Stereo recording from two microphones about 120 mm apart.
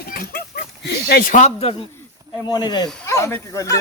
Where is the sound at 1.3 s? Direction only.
65° left (ahead or behind).